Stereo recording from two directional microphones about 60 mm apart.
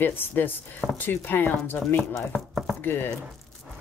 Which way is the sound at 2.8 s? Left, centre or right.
Left.